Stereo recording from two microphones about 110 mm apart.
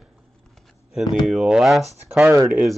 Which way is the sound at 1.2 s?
5° right (ahead or behind).